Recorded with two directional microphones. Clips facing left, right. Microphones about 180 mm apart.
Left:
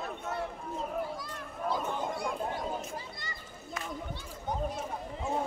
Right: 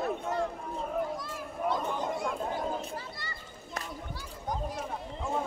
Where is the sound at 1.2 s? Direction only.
Centre (ahead or behind).